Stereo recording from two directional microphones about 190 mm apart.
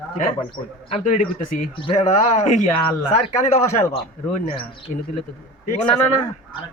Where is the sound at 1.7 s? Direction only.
35° left (ahead or behind).